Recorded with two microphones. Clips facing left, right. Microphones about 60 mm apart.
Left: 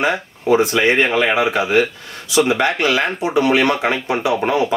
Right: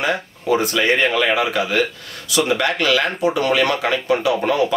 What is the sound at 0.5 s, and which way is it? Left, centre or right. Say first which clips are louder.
Speech: left 3 dB; left.